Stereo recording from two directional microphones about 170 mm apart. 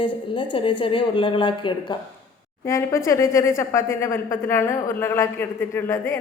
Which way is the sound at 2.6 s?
15° left (ahead or behind).